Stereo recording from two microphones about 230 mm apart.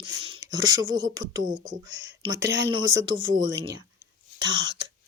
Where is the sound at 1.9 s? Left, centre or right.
Right.